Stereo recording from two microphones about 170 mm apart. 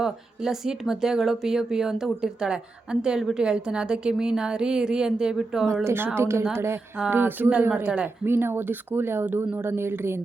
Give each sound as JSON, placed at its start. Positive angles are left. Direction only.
{"t": 0.0, "sound": "a woman's voice", "side_deg": 0}